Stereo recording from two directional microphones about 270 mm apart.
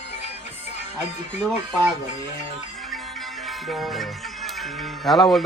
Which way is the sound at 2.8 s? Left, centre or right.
Centre.